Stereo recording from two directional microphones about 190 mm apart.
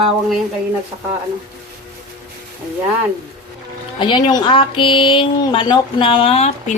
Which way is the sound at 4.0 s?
25° left (ahead or behind).